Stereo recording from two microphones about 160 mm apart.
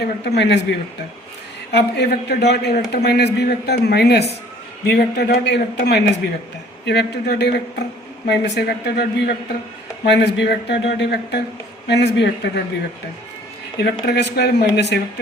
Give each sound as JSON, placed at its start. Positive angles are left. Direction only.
{"t": 0.0, "sound": "a man's voice", "side_deg": 90}
{"t": 14.0, "sound": "a man's voice", "side_deg": 90}